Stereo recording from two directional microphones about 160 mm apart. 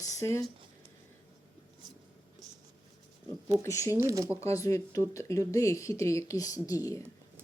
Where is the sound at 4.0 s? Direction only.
20° right (ahead or behind).